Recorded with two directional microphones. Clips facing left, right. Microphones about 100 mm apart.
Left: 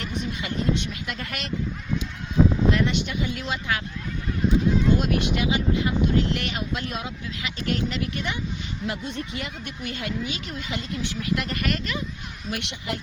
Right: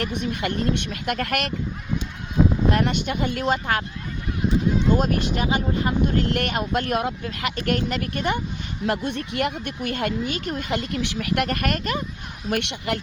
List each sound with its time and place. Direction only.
0.0 s speech: 60° right (ahead or behind)
2.6 s speech: 50° right (ahead or behind)
4.9 s speech: 45° right (ahead or behind)
8.9 s speech: 60° right (ahead or behind)